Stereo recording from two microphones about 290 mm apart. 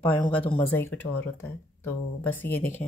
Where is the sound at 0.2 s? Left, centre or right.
Centre.